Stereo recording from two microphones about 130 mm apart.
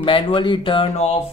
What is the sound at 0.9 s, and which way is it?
Speech, 60° left (ahead or behind).